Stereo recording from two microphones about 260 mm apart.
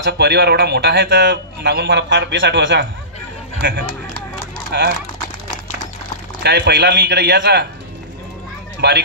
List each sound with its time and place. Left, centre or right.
0.0 s a man's voice: right
6.4 s a man's voice: right
8.8 s a man's voice: right